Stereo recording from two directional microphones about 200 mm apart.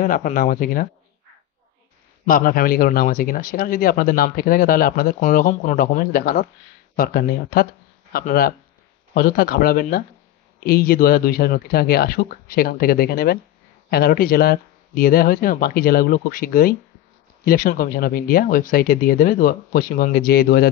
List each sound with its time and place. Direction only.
0.0 s a man's voice: 40° left (ahead or behind)
2.2 s a man's voice: 45° left (ahead or behind)